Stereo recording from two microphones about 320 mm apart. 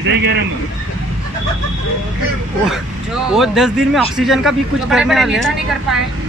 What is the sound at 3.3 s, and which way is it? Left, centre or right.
Speech, centre.